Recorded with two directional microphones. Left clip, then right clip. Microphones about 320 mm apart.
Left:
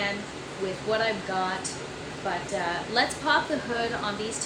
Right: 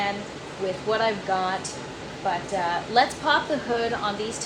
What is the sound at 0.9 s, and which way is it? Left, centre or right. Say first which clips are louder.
Speech: right 2 dB; centre.